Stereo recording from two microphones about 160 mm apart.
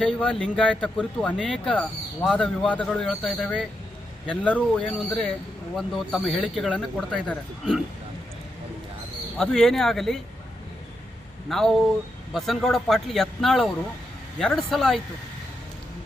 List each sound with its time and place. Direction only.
0.0 s speech: 5° left (ahead or behind)
9.4 s speech: 5° left (ahead or behind)
11.4 s speech: centre (ahead or behind)